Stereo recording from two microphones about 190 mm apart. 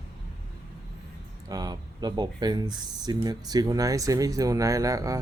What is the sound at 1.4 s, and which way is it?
Speech, 20° right (ahead or behind).